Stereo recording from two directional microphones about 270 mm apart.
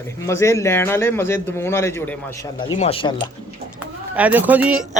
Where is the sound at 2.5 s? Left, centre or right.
Left.